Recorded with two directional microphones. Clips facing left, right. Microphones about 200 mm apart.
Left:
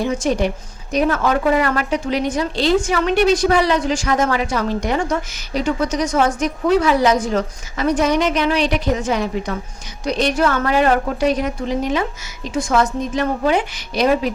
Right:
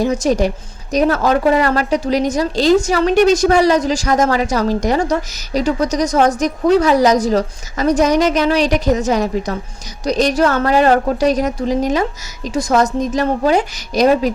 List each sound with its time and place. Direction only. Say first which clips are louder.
0.0 s a woman's voice: right 3 dB; 40° right (ahead or behind)